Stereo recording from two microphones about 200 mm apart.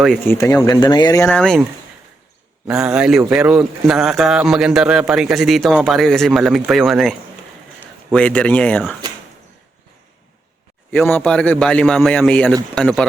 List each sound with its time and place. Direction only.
0.0 s speech: centre (ahead or behind)
0.6 s speech: 20° left (ahead or behind)
1.3 s speech: 5° left (ahead or behind)
2.6 s speech: 5° right (ahead or behind)
11.1 s speech: 5° left (ahead or behind)